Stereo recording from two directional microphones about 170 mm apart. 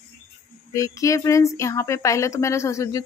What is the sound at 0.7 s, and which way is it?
Speech, 20° left (ahead or behind).